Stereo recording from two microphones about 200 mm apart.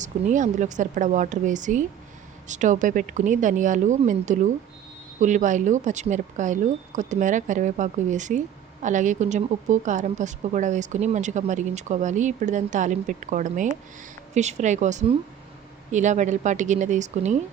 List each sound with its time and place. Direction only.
0.0 s speech: 40° right (ahead or behind)